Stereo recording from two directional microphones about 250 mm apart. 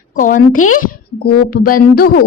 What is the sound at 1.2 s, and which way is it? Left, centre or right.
A woman's voice, left.